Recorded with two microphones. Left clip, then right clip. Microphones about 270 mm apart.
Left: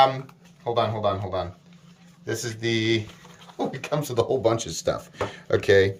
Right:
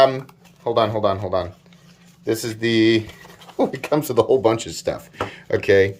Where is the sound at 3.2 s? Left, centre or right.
Right.